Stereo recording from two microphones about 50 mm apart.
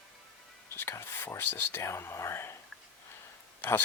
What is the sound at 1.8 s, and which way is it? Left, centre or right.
Speech, left.